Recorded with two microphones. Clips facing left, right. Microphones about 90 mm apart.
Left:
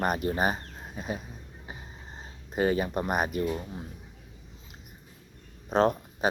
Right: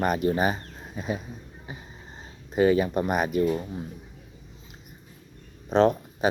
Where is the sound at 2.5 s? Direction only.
35° left (ahead or behind).